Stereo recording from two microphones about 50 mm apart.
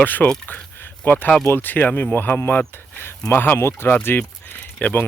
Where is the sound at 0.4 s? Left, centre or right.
Left.